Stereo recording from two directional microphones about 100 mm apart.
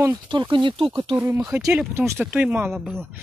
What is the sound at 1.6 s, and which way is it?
Speech, 5° right (ahead or behind).